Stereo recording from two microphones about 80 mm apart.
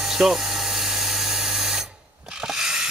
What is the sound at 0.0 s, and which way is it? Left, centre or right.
Electric toothbrush, centre.